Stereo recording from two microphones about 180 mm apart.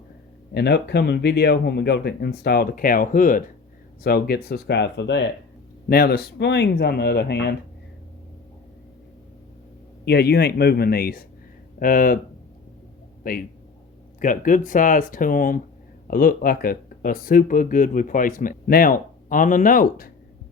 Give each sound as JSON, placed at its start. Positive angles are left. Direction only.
{"t": 0.5, "sound": "speech", "side_deg": 65}
{"t": 4.0, "sound": "speech", "side_deg": 60}
{"t": 5.9, "sound": "speech", "side_deg": 60}
{"t": 10.1, "sound": "speech", "side_deg": 65}
{"t": 13.2, "sound": "speech", "side_deg": 55}